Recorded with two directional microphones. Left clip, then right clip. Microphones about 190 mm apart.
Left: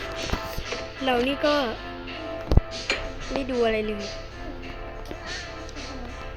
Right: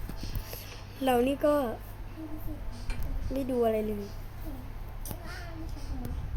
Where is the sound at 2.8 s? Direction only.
40° left (ahead or behind).